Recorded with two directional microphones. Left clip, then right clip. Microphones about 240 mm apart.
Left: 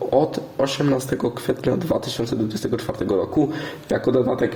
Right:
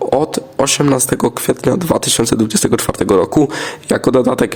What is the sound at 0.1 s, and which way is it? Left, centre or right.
Speech, right.